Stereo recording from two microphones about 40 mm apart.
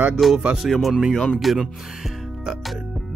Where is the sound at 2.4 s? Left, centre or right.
Centre.